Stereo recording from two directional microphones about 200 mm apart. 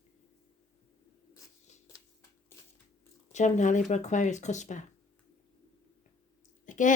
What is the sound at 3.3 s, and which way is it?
Speech, 35° left (ahead or behind).